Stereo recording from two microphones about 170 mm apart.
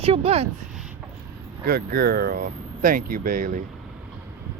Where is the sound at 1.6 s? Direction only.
60° right (ahead or behind).